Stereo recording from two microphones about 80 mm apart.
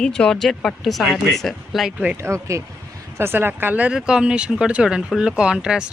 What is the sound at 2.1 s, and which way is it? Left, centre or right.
Speech, right.